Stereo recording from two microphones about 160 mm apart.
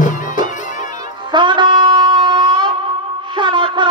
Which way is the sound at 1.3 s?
30° right (ahead or behind).